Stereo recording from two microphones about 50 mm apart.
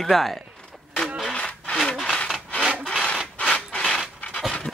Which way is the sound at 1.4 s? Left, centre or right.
Left.